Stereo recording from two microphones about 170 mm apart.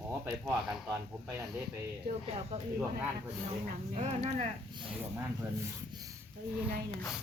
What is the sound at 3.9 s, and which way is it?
Speech, 40° right (ahead or behind).